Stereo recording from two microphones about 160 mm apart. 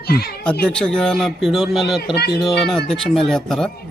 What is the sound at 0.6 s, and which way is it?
Speech, 5° left (ahead or behind).